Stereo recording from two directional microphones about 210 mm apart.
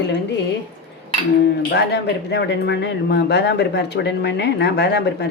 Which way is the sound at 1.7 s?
55° left (ahead or behind).